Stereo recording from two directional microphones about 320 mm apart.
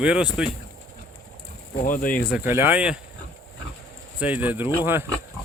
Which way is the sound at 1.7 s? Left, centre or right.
Left.